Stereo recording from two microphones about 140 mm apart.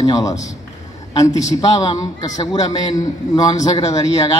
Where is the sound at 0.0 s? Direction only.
25° left (ahead or behind).